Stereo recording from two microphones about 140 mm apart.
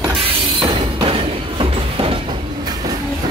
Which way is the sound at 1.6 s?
40° right (ahead or behind).